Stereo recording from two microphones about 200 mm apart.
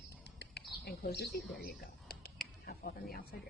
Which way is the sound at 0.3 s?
55° left (ahead or behind).